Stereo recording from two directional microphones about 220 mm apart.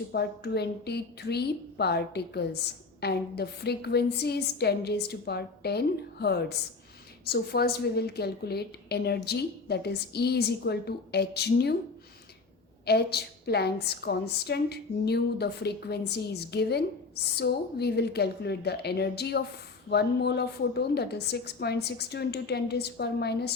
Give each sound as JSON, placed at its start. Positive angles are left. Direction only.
{"t": 0.1, "sound": "a woman's voice", "side_deg": 50}
{"t": 12.8, "sound": "a woman's voice", "side_deg": 45}